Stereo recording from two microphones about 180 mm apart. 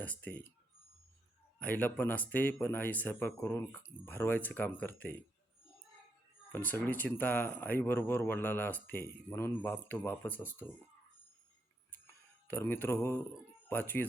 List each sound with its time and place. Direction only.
0.0 s speech: 10° left (ahead or behind)
1.5 s speech: 10° left (ahead or behind)
6.5 s speech: 10° left (ahead or behind)
12.5 s speech: 10° left (ahead or behind)